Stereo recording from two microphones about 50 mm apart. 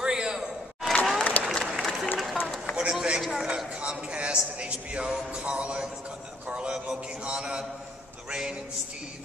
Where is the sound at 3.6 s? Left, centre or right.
Right.